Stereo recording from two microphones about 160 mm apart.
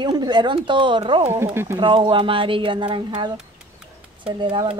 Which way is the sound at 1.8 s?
30° right (ahead or behind).